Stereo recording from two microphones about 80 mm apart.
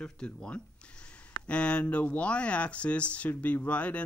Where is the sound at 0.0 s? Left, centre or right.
Centre.